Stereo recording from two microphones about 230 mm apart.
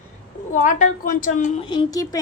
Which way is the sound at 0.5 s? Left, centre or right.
Left.